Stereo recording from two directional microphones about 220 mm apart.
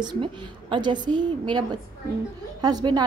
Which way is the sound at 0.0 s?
20° right (ahead or behind).